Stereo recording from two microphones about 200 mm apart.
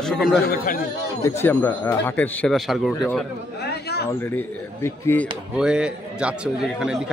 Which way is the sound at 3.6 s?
55° left (ahead or behind).